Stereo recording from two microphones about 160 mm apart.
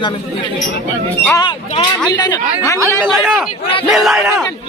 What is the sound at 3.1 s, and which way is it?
Speech, centre (ahead or behind).